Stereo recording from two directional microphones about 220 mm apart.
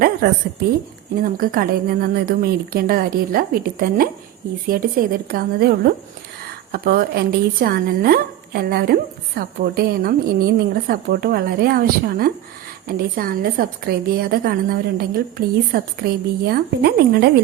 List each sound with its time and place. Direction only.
1.2 s a woman's voice: 40° right (ahead or behind)